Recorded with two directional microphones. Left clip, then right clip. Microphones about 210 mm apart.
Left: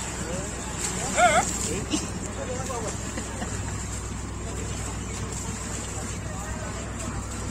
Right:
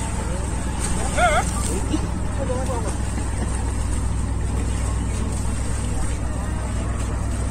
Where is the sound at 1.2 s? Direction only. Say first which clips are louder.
Right 1 dB; 50° left (ahead or behind).